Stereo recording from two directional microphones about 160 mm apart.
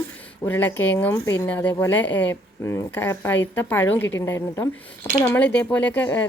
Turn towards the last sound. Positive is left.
turn(degrees=15)  # may be behind; listen again after turning